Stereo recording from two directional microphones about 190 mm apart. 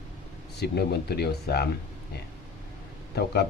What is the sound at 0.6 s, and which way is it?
Speech, 60° left (ahead or behind).